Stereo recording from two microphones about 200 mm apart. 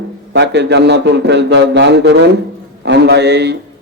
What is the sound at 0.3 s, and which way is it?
A man's voice, 60° right (ahead or behind).